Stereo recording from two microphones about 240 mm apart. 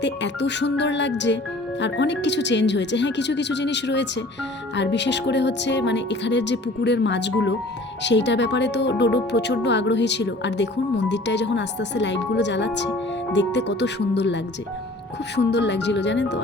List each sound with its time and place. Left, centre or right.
0.0 s speech: left